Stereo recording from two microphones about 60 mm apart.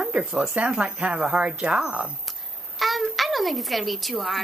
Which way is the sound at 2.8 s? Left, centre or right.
Centre.